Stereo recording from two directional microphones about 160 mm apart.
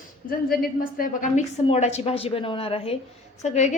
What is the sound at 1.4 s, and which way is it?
A woman's voice, 45° left (ahead or behind).